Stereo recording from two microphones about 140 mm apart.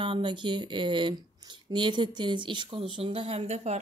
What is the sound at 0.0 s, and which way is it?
Speech, 35° right (ahead or behind).